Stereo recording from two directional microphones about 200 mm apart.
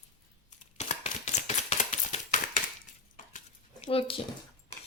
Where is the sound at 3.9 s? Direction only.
25° left (ahead or behind).